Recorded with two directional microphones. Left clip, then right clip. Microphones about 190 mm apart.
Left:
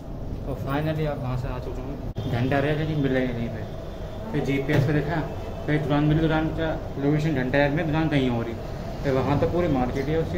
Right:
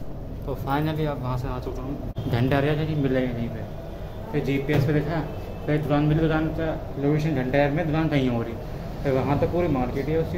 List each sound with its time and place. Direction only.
0.7 s speech: 30° right (ahead or behind)
2.3 s speech: 25° right (ahead or behind)
3.0 s a man's voice: 10° right (ahead or behind)
4.3 s a man's voice: 5° right (ahead or behind)